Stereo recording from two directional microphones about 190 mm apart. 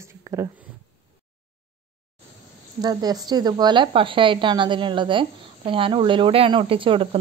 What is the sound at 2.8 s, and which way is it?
Speech, 20° right (ahead or behind).